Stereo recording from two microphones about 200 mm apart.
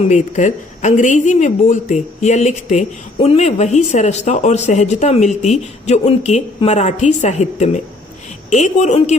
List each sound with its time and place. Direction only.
0.0 s a woman's voice: 35° left (ahead or behind)